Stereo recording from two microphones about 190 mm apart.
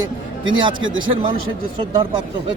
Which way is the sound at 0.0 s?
90° right.